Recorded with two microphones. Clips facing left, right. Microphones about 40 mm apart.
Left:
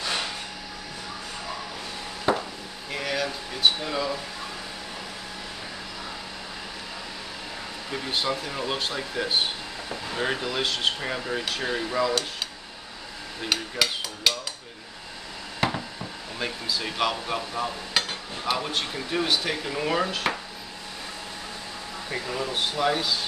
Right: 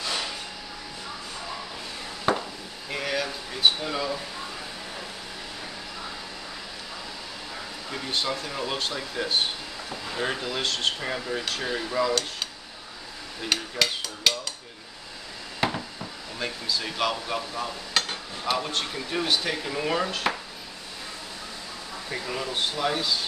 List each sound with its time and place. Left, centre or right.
0.0 s a sound: left
2.9 s speech: centre
7.9 s speech: centre
10.3 s speech: centre
13.5 s speech: centre
15.6 s speech: centre
22.1 s speech: centre